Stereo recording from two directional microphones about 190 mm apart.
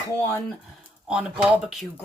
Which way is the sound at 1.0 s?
5° right (ahead or behind).